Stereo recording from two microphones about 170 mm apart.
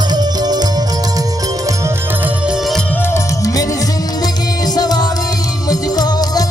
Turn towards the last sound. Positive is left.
turn(degrees=25)  # may be behind; listen again after turning